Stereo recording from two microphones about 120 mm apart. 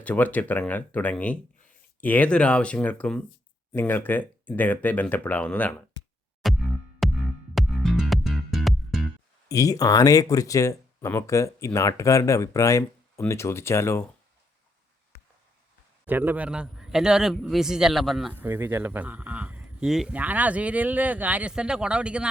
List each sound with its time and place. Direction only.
0.0 s speech: 15° left (ahead or behind)
6.4 s music: centre (ahead or behind)
9.5 s speech: 30° left (ahead or behind)
16.0 s speech: 15° right (ahead or behind)
18.3 s speech: 20° right (ahead or behind); by 20.1 s centre (ahead or behind)
20.1 s speech: 15° right (ahead or behind)